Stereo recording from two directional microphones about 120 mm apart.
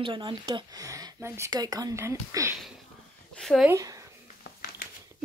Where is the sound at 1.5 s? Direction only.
35° right (ahead or behind).